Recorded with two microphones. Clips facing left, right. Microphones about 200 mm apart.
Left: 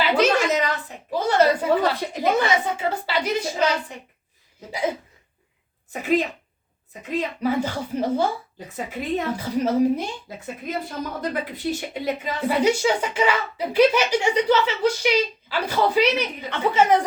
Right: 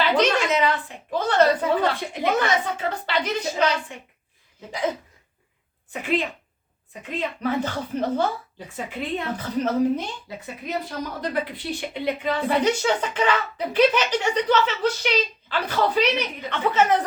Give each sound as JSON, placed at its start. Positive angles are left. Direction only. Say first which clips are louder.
{"t": 0.0, "sound": "a sound", "louder": "left 1 dB", "side_deg": 10}
{"t": 0.3, "sound": "a sound", "louder": "even", "side_deg": 40}
{"t": 1.1, "sound": "a sound", "louder": "left 1 dB", "side_deg": 10}
{"t": 2.3, "sound": "speech", "louder": "left 1 dB", "side_deg": 10}
{"t": 5.9, "sound": "speech", "louder": "left 3 dB", "side_deg": 40}
{"t": 7.4, "sound": "speech", "louder": "left 1 dB", "side_deg": 10}
{"t": 8.5, "sound": "a woman's voice", "louder": "left 1 dB", "side_deg": 40}
{"t": 9.3, "sound": "speech", "louder": "left 1 dB", "side_deg": 10}
{"t": 10.2, "sound": "a woman's voice", "louder": "left 1 dB", "side_deg": 50}
{"t": 12.5, "sound": "speech", "louder": "left 3 dB", "side_deg": 10}